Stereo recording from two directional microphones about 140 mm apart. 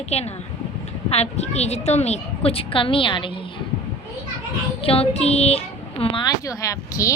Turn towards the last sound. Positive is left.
turn(degrees=25)  # may be behind; listen again after turning